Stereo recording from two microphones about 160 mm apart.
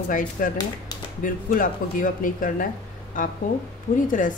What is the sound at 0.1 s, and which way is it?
A woman's voice, 55° left (ahead or behind).